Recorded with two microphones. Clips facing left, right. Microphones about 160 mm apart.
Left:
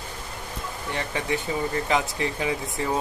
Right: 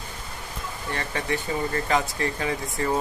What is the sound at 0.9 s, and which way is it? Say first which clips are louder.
Speech: left 1 dB; 15° left (ahead or behind).